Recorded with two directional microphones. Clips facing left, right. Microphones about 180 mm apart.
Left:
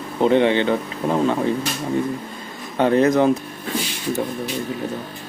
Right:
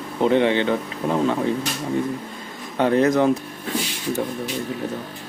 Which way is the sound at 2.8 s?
25° left (ahead or behind).